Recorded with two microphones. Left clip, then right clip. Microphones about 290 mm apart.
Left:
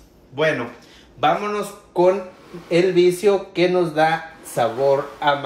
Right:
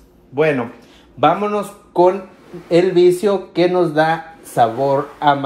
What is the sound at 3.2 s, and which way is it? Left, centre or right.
Speech, right.